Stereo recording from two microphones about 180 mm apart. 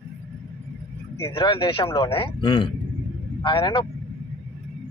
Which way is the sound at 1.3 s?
25° left (ahead or behind).